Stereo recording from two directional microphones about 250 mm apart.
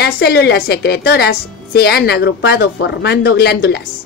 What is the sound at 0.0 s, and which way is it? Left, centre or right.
A woman's voice, left.